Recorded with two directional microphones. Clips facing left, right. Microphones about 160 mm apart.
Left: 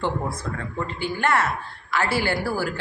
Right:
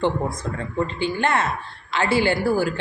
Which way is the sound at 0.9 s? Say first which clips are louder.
Left 2 dB; 20° right (ahead or behind).